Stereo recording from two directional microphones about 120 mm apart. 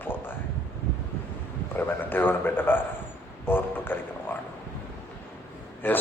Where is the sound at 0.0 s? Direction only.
15° left (ahead or behind).